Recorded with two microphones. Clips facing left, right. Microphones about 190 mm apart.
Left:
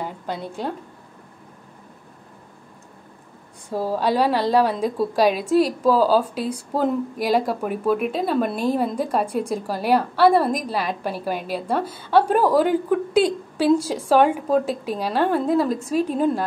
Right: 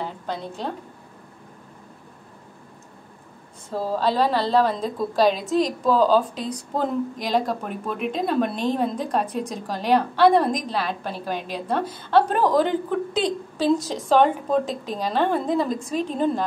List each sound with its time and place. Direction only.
0.0 s a woman's voice: 10° left (ahead or behind)
3.7 s a woman's voice: 10° left (ahead or behind)